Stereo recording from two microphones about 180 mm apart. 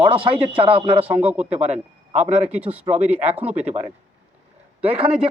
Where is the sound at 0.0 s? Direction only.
30° right (ahead or behind).